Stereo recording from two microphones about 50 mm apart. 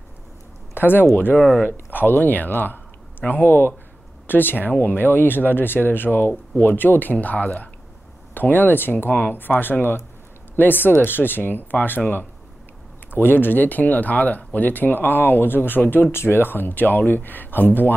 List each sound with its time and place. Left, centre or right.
0.7 s speech: left
13.1 s speech: left